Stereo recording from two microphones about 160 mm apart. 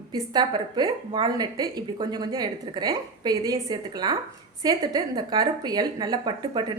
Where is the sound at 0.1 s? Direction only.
30° right (ahead or behind).